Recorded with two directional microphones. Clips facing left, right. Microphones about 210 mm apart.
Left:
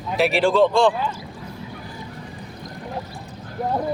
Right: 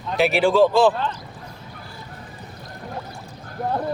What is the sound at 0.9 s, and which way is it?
Speech, 10° left (ahead or behind).